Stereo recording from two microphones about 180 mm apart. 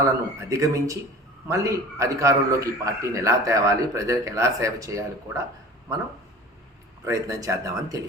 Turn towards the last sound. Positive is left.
turn(degrees=-20)  # may be behind; listen again after turning